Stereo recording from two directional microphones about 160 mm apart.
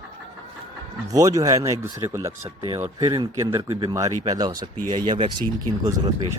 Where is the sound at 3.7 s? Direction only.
35° right (ahead or behind).